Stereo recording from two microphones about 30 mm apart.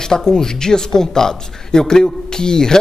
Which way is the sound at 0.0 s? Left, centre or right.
Left.